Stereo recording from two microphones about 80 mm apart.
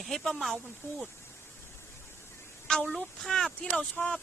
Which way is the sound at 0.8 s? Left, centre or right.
Left.